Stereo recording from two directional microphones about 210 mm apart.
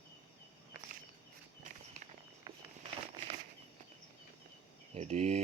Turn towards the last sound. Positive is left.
turn(degrees=-30)  # may be behind; listen again after turning